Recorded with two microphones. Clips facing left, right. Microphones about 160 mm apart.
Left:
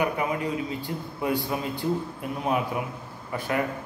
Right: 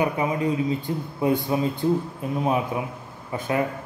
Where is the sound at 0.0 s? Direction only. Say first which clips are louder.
Right 3 dB; 20° right (ahead or behind).